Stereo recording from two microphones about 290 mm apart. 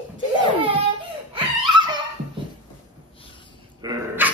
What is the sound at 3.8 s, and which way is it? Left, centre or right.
Dog, centre.